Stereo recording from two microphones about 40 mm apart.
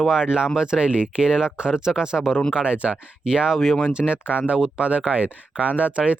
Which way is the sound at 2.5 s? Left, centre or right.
Right.